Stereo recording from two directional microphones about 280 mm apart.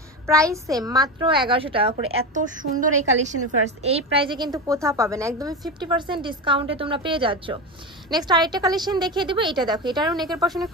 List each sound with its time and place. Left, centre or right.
0.3 s a child's voice: centre